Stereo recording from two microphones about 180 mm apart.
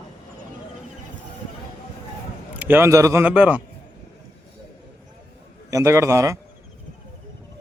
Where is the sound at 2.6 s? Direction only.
10° right (ahead or behind).